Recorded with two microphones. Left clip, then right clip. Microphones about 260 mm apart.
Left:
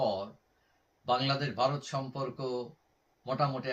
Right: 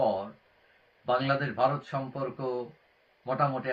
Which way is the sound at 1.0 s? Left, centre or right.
Centre.